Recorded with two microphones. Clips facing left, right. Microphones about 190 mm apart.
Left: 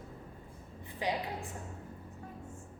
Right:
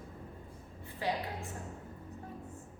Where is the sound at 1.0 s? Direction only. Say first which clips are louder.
Left 1 dB; 15° left (ahead or behind).